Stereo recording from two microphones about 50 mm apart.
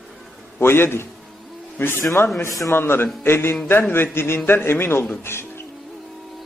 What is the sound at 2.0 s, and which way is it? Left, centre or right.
Speech, left.